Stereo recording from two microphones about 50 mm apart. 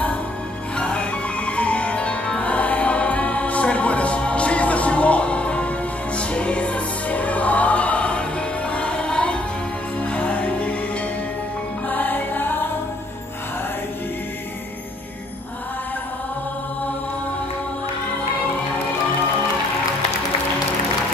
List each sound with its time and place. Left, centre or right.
0.7 s music: left
11.9 s music: left